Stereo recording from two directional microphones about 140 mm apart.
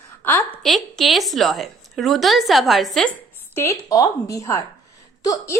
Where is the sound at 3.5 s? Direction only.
20° left (ahead or behind).